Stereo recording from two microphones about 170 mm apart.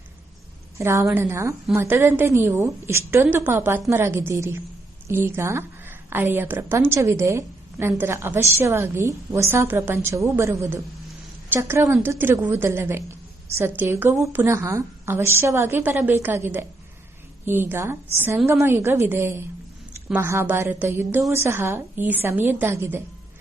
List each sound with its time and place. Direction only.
0.8 s a woman's voice: 15° right (ahead or behind)